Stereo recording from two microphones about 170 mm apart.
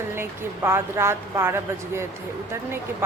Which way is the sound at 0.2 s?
15° right (ahead or behind).